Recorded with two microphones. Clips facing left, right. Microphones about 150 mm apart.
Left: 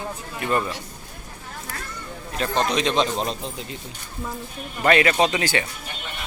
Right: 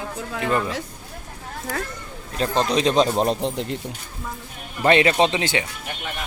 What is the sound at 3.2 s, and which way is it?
Speech, 65° right (ahead or behind).